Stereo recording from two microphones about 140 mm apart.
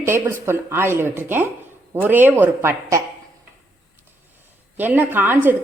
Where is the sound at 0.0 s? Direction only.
20° right (ahead or behind).